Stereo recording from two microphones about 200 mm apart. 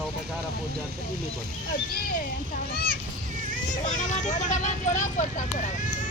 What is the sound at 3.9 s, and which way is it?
Speech, 40° left (ahead or behind).